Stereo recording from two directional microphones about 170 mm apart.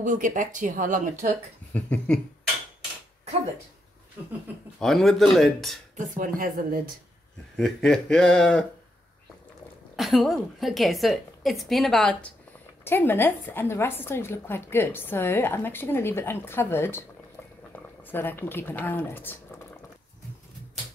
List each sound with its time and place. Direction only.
0.0 s speech: 50° right (ahead or behind)
1.7 s a woman's voice: 10° left (ahead or behind)
4.7 s a woman's voice: centre (ahead or behind)
5.9 s speech: 50° right (ahead or behind)
7.5 s a woman's voice: 5° left (ahead or behind)
9.9 s a woman's voice: centre (ahead or behind)